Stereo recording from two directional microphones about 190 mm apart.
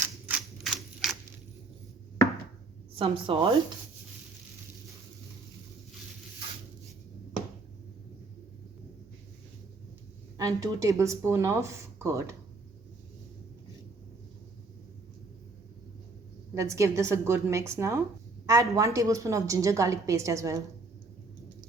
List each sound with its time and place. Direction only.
0.3 s a sound: 5° right (ahead or behind)
3.0 s a woman's voice: 30° right (ahead or behind)
10.3 s a woman's voice: 15° right (ahead or behind)
16.6 s a woman's voice: 15° right (ahead or behind)